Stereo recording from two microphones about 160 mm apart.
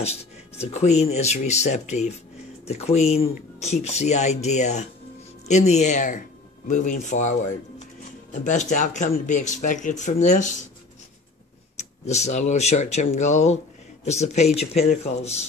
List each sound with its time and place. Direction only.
0.0 s speech: 40° left (ahead or behind)
11.7 s speech: 45° left (ahead or behind)